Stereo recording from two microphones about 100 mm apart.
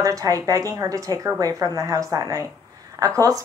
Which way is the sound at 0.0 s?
35° right (ahead or behind).